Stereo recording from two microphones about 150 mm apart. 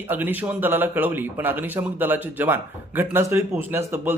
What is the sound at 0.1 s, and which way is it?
Speech, 10° right (ahead or behind).